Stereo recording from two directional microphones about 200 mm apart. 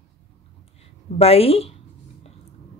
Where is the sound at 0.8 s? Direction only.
30° left (ahead or behind).